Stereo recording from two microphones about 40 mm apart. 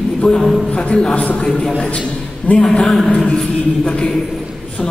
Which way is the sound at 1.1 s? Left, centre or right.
Left.